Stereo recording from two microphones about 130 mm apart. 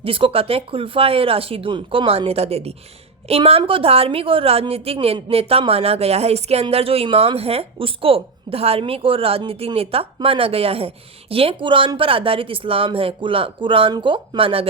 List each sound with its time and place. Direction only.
0.0 s a woman's voice: 45° right (ahead or behind)